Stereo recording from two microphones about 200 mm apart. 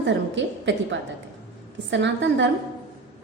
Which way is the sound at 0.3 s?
65° right (ahead or behind).